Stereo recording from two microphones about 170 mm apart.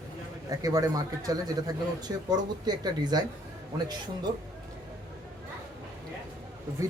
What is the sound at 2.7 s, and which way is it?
Speech, 25° right (ahead or behind).